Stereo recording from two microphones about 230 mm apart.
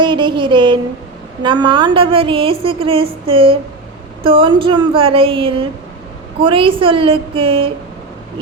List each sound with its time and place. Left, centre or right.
0.0 s a woman's voice: right